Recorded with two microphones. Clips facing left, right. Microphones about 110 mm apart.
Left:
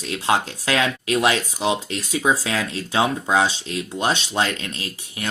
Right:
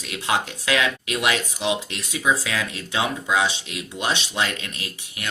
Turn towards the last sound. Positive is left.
turn(degrees=35)  # may be behind; listen again after turning